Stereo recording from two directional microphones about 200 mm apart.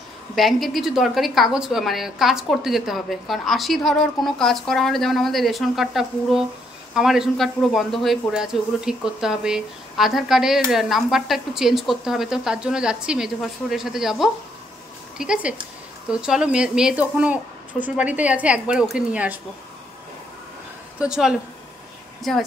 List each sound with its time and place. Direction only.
0.4 s a man's voice: centre (ahead or behind)
21.0 s a man's voice: 5° right (ahead or behind)